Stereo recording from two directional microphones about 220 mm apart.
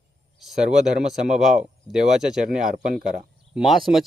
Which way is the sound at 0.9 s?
Centre (ahead or behind).